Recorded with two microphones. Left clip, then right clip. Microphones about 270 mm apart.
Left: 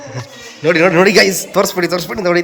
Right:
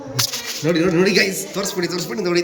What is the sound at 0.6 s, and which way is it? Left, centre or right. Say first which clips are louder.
A man's voice: left 8 dB; centre.